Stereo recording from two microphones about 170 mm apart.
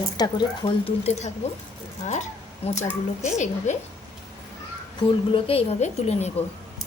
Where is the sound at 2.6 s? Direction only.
35° left (ahead or behind).